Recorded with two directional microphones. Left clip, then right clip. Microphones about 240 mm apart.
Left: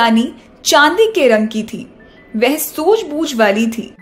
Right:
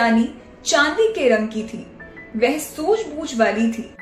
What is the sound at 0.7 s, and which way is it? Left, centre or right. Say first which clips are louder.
Speech: left 7 dB; left.